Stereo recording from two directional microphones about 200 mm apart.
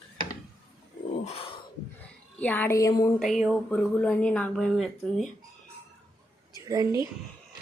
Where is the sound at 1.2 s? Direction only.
30° left (ahead or behind).